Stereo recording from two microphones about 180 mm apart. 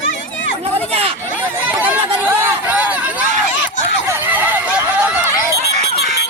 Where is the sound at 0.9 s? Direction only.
35° right (ahead or behind).